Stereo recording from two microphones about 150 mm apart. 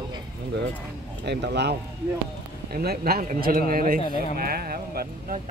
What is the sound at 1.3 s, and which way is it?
Speech, 90° right.